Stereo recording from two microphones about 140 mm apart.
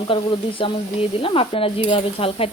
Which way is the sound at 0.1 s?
40° left (ahead or behind).